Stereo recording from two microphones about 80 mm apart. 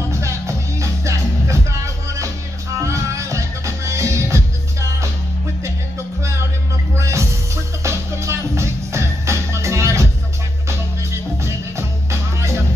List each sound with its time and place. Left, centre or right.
0.1 s music: right
2.8 s music: right
7.0 s music: right
11.4 s music: right